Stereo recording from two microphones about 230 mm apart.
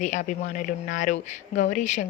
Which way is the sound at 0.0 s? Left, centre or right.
Left.